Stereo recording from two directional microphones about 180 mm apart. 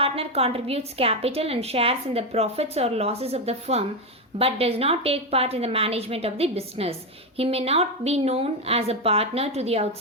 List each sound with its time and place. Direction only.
0.0 s a woman's voice: 35° right (ahead or behind)